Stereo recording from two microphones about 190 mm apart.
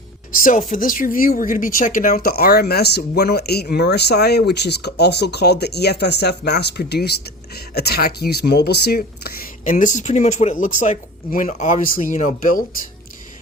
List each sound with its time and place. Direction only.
0.7 s speech: 45° left (ahead or behind)